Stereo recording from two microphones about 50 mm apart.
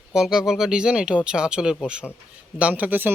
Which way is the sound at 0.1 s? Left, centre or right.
Centre.